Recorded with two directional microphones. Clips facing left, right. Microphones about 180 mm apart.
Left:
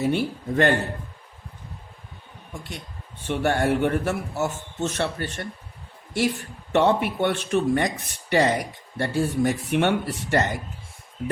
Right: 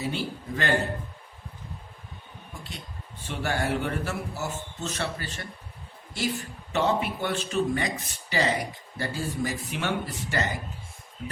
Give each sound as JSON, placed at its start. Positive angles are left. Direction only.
{"t": 0.0, "sound": "speech", "side_deg": 60}
{"t": 3.2, "sound": "speech", "side_deg": 60}
{"t": 6.7, "sound": "speech", "side_deg": 65}